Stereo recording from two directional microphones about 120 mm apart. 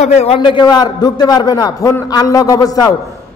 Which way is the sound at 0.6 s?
35° left (ahead or behind).